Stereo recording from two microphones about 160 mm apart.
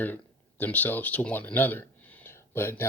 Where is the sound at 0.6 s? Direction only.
10° left (ahead or behind).